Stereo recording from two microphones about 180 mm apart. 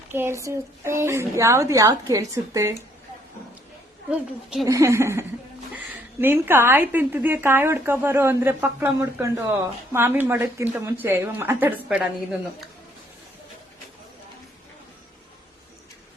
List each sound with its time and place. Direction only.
0.1 s a woman's voice: 15° right (ahead or behind)
4.1 s a woman's voice: 5° right (ahead or behind)
4.6 s a woman's voice: 15° right (ahead or behind)